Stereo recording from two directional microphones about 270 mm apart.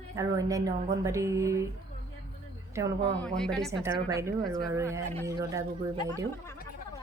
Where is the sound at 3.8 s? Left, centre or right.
Centre.